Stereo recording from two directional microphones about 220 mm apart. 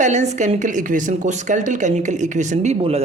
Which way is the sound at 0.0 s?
35° right (ahead or behind).